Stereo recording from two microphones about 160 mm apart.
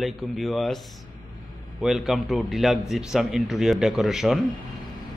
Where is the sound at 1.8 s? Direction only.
Centre (ahead or behind).